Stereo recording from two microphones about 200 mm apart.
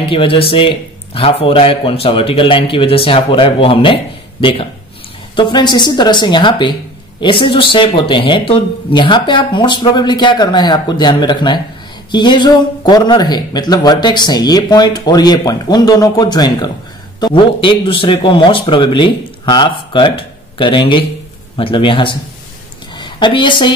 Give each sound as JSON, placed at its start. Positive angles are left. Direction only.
{"t": 0.1, "sound": "a woman's voice", "side_deg": 25}